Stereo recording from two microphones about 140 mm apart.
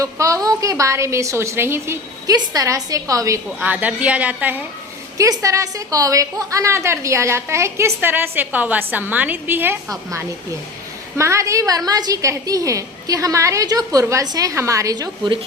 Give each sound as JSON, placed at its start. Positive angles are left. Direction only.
{"t": 0.0, "sound": "a woman's voice", "side_deg": -25}
{"t": 3.6, "sound": "a woman's voice", "side_deg": -10}
{"t": 5.1, "sound": "a woman's voice", "side_deg": -25}
{"t": 11.2, "sound": "a woman's voice", "side_deg": -20}